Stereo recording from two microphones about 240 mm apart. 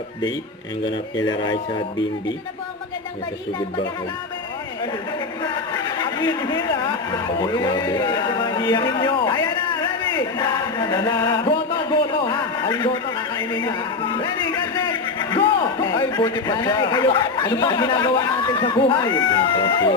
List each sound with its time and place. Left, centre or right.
0.9 s a man's voice: centre
5.4 s a man's voice: centre